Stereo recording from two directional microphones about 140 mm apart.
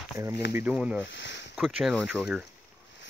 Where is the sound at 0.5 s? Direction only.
15° right (ahead or behind).